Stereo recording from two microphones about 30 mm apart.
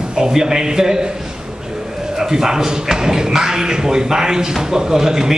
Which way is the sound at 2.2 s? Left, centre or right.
Centre.